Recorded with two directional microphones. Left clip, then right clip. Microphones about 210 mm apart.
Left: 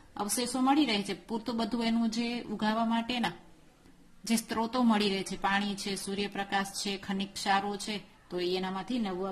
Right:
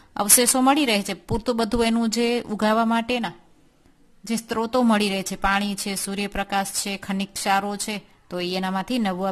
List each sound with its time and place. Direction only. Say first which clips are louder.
0.2 s a woman's voice: right 12 dB; 35° right (ahead or behind)